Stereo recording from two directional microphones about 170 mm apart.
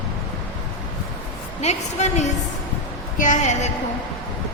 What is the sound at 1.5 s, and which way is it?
A woman's voice, 40° left (ahead or behind).